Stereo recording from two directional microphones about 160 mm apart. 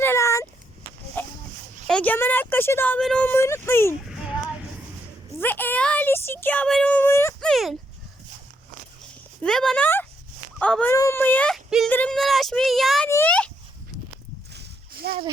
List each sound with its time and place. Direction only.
0.0 s a sound: 15° left (ahead or behind)
1.2 s fowl: 10° left (ahead or behind)
1.9 s a woman's voice: 10° left (ahead or behind)
4.0 s a sound: 5° right (ahead or behind)
5.4 s speech: 10° left (ahead or behind)
7.4 s speech: centre (ahead or behind)
9.4 s a woman's voice: 5° left (ahead or behind)
13.1 s a sound: 15° left (ahead or behind)
14.5 s splash: 85° right